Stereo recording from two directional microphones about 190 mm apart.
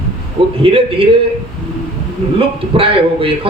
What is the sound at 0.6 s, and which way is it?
Speech, 30° right (ahead or behind).